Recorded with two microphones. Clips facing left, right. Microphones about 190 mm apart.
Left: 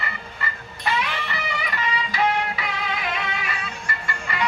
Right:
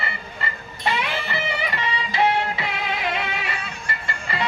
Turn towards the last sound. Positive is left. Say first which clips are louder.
# even
turn(degrees=-30)  # may be behind; listen again after turning